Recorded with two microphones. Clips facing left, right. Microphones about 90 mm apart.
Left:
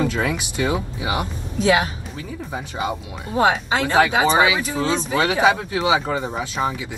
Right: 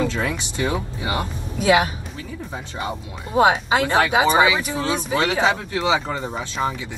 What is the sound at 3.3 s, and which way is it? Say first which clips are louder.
Speech: right 2 dB; 20° right (ahead or behind).